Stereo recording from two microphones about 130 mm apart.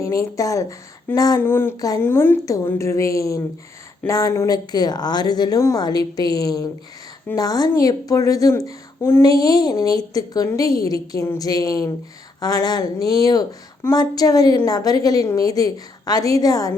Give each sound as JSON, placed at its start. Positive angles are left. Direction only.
{"t": 0.0, "sound": "a woman's voice", "side_deg": 25}
{"t": 1.7, "sound": "a woman's voice", "side_deg": 30}
{"t": 2.0, "sound": "a woman's voice", "side_deg": 15}